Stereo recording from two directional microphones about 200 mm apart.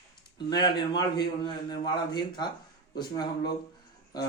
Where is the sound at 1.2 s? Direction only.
20° left (ahead or behind).